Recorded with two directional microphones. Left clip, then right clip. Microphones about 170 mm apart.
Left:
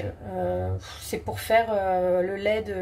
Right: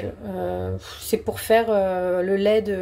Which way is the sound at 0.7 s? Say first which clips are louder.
Right 8 dB; 40° right (ahead or behind).